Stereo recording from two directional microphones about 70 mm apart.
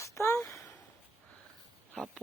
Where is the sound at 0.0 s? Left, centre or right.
Left.